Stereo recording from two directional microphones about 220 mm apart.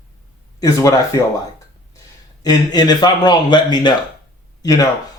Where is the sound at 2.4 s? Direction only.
15° left (ahead or behind).